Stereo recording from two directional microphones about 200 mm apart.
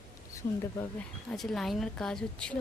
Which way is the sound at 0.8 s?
5° left (ahead or behind).